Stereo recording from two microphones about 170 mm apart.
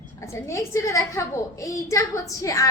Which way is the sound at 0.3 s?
15° left (ahead or behind).